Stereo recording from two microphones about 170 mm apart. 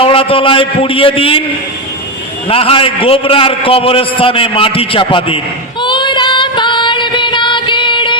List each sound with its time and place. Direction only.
0.0 s a man's voice: 30° left (ahead or behind)
2.5 s a man's voice: 35° left (ahead or behind)
5.8 s female singing: 30° left (ahead or behind)